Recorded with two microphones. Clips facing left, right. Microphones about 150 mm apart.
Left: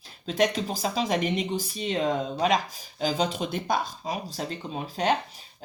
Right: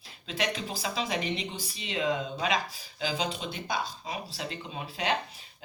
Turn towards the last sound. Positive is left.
turn(degrees=40)  # may be behind; listen again after turning